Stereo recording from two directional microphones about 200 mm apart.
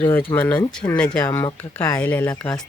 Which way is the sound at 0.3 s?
10° left (ahead or behind).